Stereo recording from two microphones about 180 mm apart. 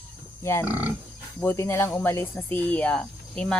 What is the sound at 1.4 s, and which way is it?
Speech, 15° left (ahead or behind).